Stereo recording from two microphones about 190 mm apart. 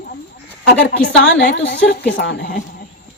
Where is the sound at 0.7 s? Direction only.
55° left (ahead or behind).